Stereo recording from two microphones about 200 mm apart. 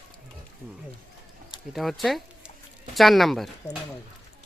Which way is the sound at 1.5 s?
Centre (ahead or behind).